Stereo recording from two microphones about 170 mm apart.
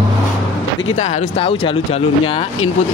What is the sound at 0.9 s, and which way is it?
Speech, 45° left (ahead or behind).